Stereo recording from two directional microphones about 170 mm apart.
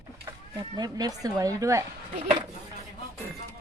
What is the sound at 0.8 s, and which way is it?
A woman's voice, 20° right (ahead or behind).